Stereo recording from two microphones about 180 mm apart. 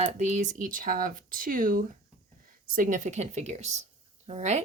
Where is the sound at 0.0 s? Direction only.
45° right (ahead or behind).